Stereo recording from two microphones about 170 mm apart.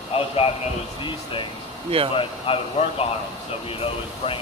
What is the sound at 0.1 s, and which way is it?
A man's voice, 35° left (ahead or behind).